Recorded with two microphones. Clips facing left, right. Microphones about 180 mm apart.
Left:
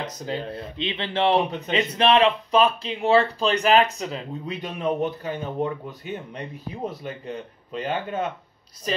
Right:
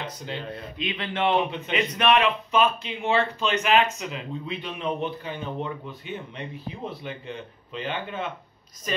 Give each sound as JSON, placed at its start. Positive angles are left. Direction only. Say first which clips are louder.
{"t": 0.0, "sound": "speech", "louder": "left 4 dB", "side_deg": 40}
{"t": 0.7, "sound": "speech", "louder": "left 3 dB", "side_deg": 30}